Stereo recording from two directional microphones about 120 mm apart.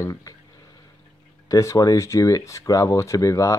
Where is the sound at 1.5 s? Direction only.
25° left (ahead or behind).